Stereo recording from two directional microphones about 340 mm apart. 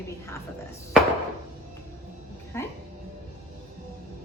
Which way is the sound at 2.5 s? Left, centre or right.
Centre.